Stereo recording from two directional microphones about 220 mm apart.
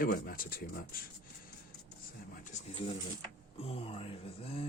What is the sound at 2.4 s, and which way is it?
Speech, 30° left (ahead or behind).